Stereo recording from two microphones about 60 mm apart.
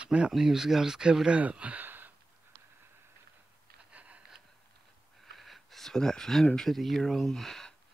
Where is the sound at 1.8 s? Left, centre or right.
Right.